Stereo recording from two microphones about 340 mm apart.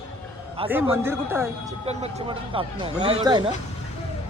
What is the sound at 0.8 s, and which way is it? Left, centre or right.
Speech, centre.